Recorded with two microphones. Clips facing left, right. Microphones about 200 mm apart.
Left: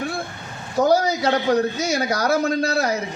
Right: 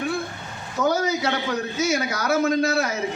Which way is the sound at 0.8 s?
35° left (ahead or behind).